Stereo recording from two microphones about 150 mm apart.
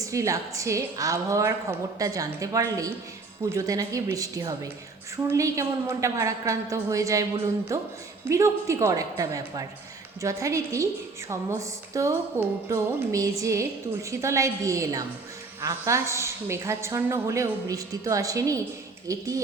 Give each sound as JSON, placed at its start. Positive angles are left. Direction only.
{"t": 0.0, "sound": "a woman's voice", "side_deg": -20}